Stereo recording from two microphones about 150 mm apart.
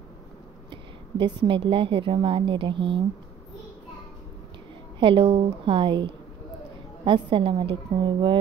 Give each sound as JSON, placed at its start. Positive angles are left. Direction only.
{"t": 0.7, "sound": "a woman's voice", "side_deg": -35}
{"t": 5.0, "sound": "a woman's voice", "side_deg": -35}